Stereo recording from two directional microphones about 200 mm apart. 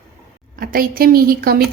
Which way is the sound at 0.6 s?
45° right (ahead or behind).